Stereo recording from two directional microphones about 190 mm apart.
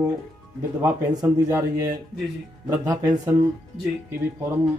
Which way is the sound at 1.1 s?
15° right (ahead or behind).